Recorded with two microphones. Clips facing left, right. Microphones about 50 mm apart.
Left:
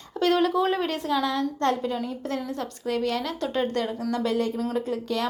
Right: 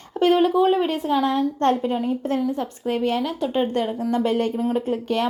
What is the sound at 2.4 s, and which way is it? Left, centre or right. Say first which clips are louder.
Speech: right 7 dB; centre.